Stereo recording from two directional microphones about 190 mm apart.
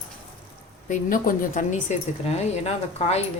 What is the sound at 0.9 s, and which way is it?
A woman's voice, 45° left (ahead or behind).